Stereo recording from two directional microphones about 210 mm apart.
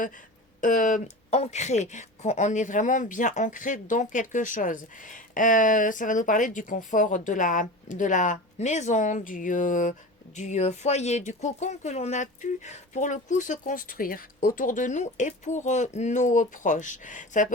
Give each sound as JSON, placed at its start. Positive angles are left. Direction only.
{"t": 0.6, "sound": "a woman's voice", "side_deg": 35}